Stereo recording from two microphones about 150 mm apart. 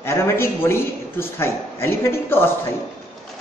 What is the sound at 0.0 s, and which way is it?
A man's voice, 15° left (ahead or behind).